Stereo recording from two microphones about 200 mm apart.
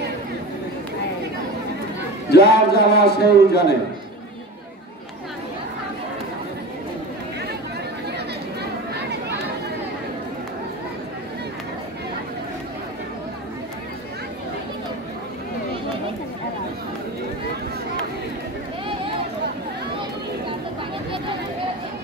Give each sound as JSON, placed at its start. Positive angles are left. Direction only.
{"t": 2.3, "sound": "a man's voice", "side_deg": 55}
{"t": 8.9, "sound": "chatter", "side_deg": -55}